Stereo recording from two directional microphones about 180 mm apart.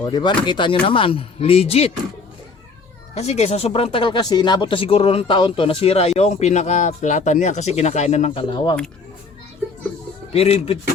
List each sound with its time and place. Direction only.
0.0 s speech: 25° left (ahead or behind)
3.2 s speech: 35° left (ahead or behind)
10.3 s speech: 35° left (ahead or behind)